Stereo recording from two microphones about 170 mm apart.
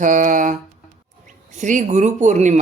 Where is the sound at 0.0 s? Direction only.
50° right (ahead or behind).